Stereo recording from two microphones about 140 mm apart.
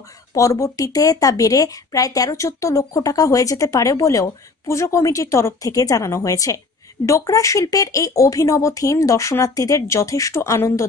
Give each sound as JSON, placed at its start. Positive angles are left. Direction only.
{"t": 0.3, "sound": "a woman's voice", "side_deg": 20}